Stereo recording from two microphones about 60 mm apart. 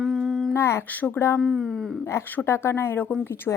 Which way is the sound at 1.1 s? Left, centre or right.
Left.